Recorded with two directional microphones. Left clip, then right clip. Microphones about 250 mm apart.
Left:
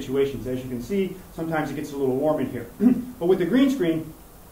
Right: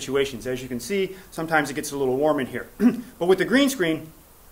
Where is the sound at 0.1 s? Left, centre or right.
Right.